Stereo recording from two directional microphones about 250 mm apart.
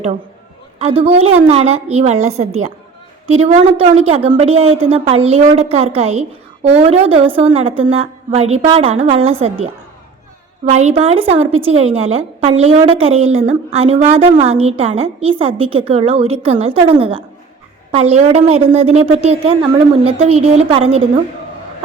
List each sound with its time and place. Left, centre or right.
0.8 s a woman's voice: right
10.7 s a woman's voice: right